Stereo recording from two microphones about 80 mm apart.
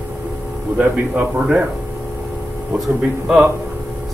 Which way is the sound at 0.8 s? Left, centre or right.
Centre.